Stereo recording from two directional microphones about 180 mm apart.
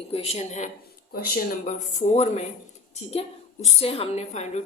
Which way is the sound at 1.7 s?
40° left (ahead or behind).